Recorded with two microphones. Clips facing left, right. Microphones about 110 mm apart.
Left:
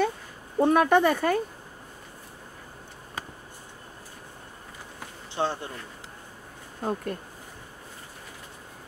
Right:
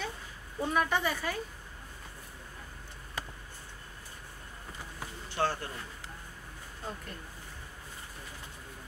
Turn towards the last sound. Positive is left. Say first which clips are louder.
# left 12 dB
turn(degrees=50)  # may be behind; listen again after turning